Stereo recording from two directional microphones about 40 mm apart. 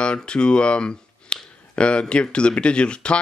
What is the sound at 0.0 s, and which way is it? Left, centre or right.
Speech, left.